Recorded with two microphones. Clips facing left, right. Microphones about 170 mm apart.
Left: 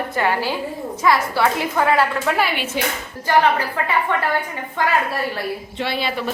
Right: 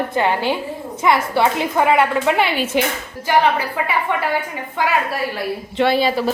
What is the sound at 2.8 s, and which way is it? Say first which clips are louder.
Speech: right 5 dB; 70° right (ahead or behind).